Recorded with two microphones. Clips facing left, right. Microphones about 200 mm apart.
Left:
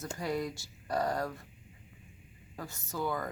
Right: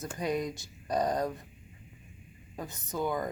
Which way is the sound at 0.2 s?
20° right (ahead or behind).